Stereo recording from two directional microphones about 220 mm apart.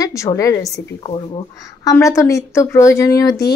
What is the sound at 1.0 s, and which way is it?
Speech, 25° left (ahead or behind).